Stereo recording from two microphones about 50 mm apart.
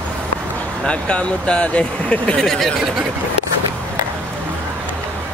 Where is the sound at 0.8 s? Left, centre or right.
Left.